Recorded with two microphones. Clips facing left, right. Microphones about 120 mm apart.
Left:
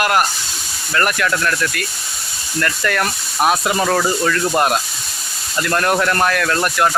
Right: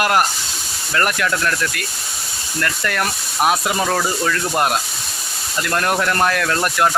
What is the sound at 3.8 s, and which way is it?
Speech, centre (ahead or behind).